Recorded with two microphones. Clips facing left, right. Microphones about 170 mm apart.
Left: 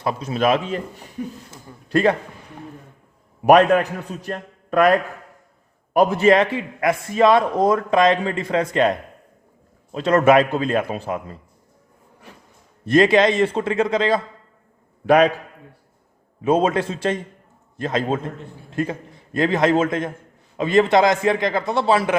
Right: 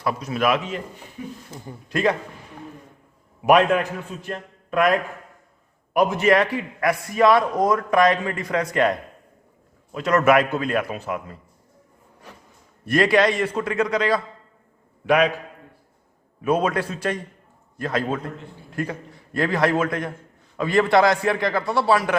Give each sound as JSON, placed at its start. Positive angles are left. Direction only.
{"t": 0.0, "sound": "a man's voice", "side_deg": 25}
{"t": 1.2, "sound": "speech", "side_deg": 50}
{"t": 1.9, "sound": "a man's voice", "side_deg": 35}
{"t": 3.4, "sound": "a man's voice", "side_deg": 35}
{"t": 12.8, "sound": "a man's voice", "side_deg": 25}
{"t": 15.0, "sound": "a man's voice", "side_deg": 35}
{"t": 16.4, "sound": "a man's voice", "side_deg": 25}